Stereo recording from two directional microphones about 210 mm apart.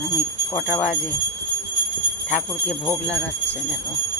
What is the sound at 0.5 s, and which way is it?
Speech, 35° left (ahead or behind).